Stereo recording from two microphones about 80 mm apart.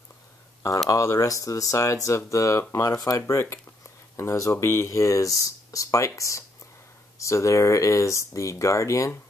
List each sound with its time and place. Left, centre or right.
0.8 s speech: left